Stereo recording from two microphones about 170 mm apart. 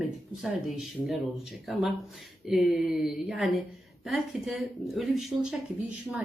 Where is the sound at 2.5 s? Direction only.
Centre (ahead or behind).